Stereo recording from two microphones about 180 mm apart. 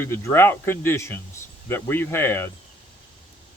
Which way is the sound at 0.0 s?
15° left (ahead or behind).